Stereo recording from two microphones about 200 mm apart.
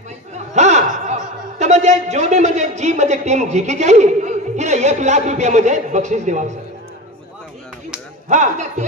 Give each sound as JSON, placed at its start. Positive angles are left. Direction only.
{"t": 0.6, "sound": "a man's voice", "side_deg": -35}
{"t": 8.3, "sound": "speech", "side_deg": -35}